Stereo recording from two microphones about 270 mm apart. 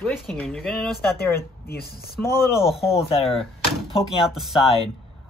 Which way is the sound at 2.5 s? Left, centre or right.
Centre.